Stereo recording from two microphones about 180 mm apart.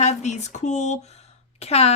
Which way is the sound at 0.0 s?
40° left (ahead or behind).